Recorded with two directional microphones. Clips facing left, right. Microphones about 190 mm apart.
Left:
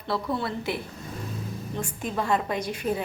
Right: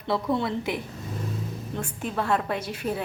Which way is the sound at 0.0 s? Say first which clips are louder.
Right 3 dB; 20° right (ahead or behind).